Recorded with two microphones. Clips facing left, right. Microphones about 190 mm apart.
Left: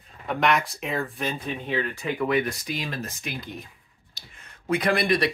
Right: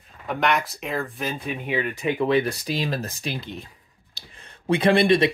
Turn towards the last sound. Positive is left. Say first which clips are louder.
# right 5 dB
turn(degrees=-25)  # may be behind; listen again after turning